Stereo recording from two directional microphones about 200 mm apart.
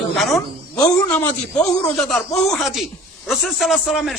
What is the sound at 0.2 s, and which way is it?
A woman's voice, centre (ahead or behind).